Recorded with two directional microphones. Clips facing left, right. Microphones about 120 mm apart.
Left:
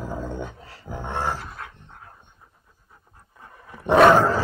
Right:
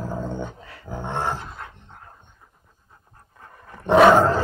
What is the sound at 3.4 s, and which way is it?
Dog, 10° left (ahead or behind).